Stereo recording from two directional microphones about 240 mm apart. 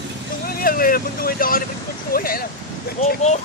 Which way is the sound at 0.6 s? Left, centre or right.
Left.